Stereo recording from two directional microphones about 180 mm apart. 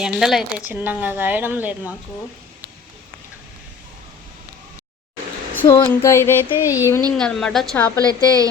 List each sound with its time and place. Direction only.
0.0 s speech: centre (ahead or behind)
5.6 s a sound: 20° left (ahead or behind)
6.6 s speech: 10° right (ahead or behind)
7.2 s a woman's voice: 5° left (ahead or behind)
8.0 s a woman's voice: 20° right (ahead or behind)